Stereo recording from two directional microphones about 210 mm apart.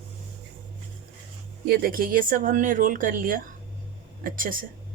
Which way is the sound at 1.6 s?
45° right (ahead or behind).